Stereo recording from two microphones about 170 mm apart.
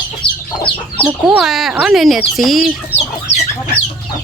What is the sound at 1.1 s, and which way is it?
Speech, centre (ahead or behind).